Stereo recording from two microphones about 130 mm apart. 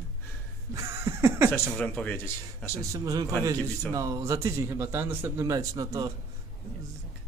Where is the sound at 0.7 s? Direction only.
20° right (ahead or behind).